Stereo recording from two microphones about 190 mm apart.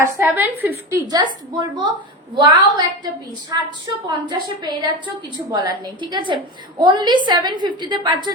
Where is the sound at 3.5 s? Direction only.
20° right (ahead or behind).